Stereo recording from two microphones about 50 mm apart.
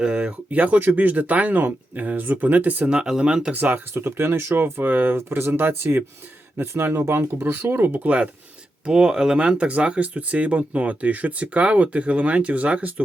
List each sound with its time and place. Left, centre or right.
0.0 s speech: right
2.9 s speech: centre
3.5 s speech: right
4.0 s speech: right
4.6 s speech: right
8.9 s speech: centre